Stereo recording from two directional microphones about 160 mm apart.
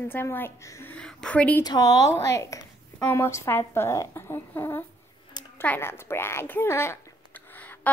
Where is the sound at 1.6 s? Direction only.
25° left (ahead or behind).